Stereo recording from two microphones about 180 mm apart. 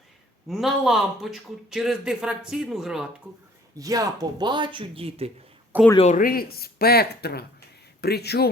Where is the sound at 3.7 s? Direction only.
20° right (ahead or behind).